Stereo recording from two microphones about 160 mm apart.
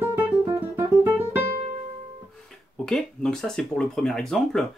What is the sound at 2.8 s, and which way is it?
Speech, 5° left (ahead or behind).